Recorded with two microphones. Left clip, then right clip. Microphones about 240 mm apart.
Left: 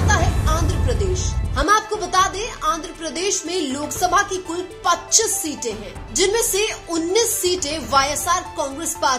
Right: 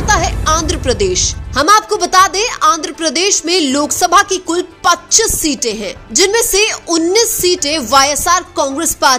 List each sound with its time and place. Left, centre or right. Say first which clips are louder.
0.0 s a woman's voice: right 7 dB; right